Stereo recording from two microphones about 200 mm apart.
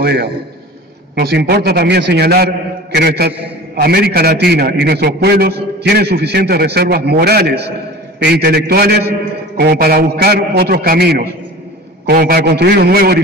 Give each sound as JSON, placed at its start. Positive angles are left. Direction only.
{"t": 0.0, "sound": "a man's voice", "side_deg": -55}